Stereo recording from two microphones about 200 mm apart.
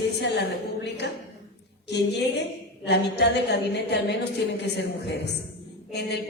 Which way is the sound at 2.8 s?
55° left (ahead or behind).